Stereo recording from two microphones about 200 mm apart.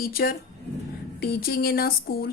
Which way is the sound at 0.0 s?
50° left (ahead or behind).